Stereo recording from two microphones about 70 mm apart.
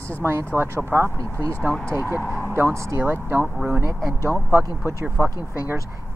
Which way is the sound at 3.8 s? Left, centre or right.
Right.